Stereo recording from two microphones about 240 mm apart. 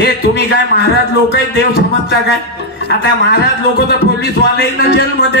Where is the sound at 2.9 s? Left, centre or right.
Left.